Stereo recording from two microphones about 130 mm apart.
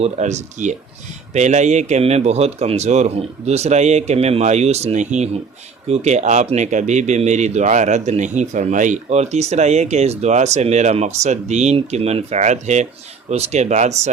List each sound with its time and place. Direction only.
0.0 s speech: 60° right (ahead or behind)